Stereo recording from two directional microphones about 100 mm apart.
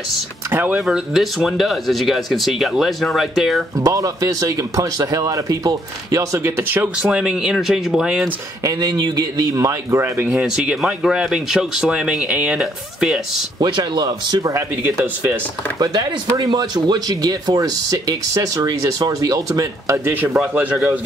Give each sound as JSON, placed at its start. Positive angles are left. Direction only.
{"t": 0.5, "sound": "speech", "side_deg": -20}
{"t": 0.7, "sound": "speech", "side_deg": -5}
{"t": 3.7, "sound": "speech", "side_deg": -35}
{"t": 8.6, "sound": "speech", "side_deg": -40}
{"t": 10.3, "sound": "speech", "side_deg": -10}
{"t": 13.6, "sound": "speech", "side_deg": -50}
{"t": 15.8, "sound": "speech", "side_deg": -40}
{"t": 20.3, "sound": "speech", "side_deg": -15}